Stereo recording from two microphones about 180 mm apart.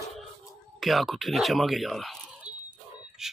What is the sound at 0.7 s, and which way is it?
Speech, centre (ahead or behind).